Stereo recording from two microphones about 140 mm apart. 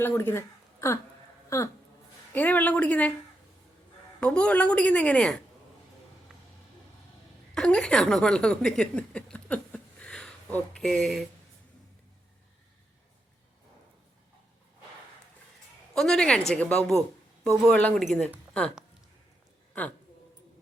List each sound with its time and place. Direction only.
0.0 s a woman's voice: 15° left (ahead or behind)
4.2 s a woman's voice: 10° left (ahead or behind)
7.5 s speech: 5° left (ahead or behind)
16.0 s speech: 5° left (ahead or behind)